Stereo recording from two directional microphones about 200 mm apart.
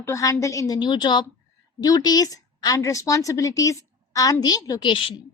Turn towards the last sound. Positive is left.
turn(degrees=25)  # may be behind; listen again after turning